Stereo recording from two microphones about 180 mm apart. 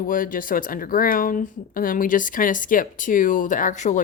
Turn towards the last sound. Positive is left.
turn(degrees=45)  # may be behind; listen again after turning